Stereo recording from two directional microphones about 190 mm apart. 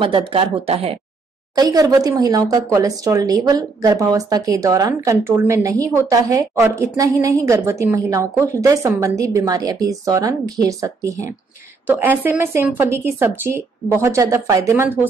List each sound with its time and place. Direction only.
0.0 s speech: 25° right (ahead or behind)
1.5 s speech: 20° right (ahead or behind)